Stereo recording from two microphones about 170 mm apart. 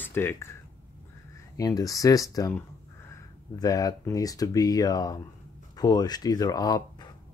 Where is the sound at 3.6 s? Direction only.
20° left (ahead or behind).